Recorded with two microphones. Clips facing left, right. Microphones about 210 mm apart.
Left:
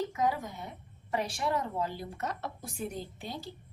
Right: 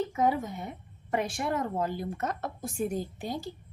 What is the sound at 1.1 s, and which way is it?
A woman's voice, 50° right (ahead or behind).